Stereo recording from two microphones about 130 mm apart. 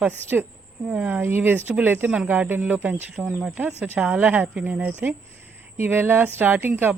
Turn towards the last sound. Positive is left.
turn(degrees=-15)  # may be behind; listen again after turning